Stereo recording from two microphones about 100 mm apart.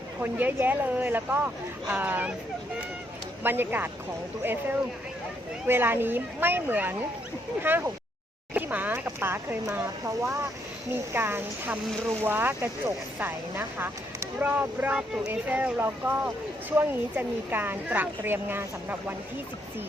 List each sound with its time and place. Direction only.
0.2 s speech: 20° right (ahead or behind)
3.4 s speech: 20° right (ahead or behind)
5.6 s speech: 20° right (ahead or behind)
10.9 s speech: 25° right (ahead or behind)